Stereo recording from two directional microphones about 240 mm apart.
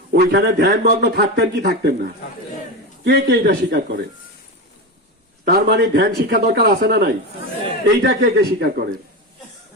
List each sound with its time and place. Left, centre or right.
0.1 s speech: right
5.5 s speech: right